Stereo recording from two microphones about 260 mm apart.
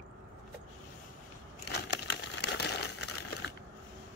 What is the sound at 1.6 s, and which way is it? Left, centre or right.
Crumpling, left.